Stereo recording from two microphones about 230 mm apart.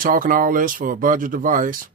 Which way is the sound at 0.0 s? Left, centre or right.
Right.